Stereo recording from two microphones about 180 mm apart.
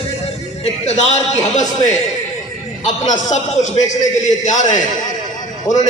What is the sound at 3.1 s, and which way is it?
A man's voice, 40° left (ahead or behind).